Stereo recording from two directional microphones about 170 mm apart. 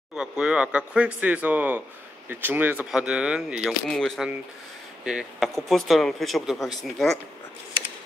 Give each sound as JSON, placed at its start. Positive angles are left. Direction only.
{"t": 0.1, "sound": "speech", "side_deg": -5}